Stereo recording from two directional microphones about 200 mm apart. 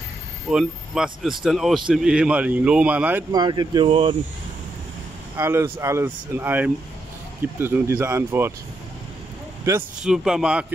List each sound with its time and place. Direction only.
0.5 s a man's voice: 5° right (ahead or behind)
3.3 s speech: 20° right (ahead or behind)
5.3 s speech: 10° right (ahead or behind)
10.0 s a man's voice: centre (ahead or behind)